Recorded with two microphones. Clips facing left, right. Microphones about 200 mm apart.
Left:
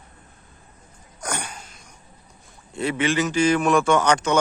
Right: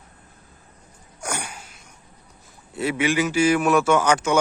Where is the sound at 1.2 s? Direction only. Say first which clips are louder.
Even; 10° right (ahead or behind).